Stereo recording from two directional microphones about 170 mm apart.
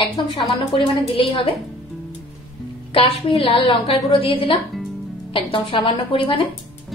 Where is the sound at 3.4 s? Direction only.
35° left (ahead or behind).